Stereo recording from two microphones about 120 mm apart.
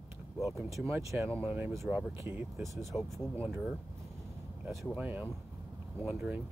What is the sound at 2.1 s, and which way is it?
Speech, 20° right (ahead or behind).